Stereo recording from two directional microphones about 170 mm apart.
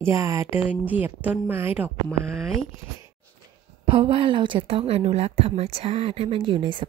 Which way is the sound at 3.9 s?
30° right (ahead or behind).